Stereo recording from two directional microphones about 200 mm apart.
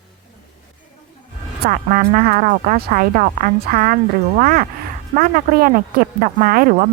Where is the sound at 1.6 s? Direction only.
45° right (ahead or behind).